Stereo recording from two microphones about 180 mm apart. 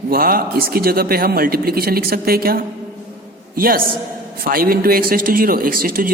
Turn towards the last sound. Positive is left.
turn(degrees=-55)  # may be behind; listen again after turning